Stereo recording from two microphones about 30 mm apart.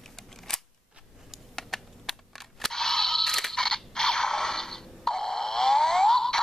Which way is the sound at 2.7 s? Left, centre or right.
Centre.